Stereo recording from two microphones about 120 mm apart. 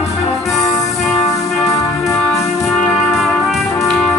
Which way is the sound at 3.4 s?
Centre (ahead or behind).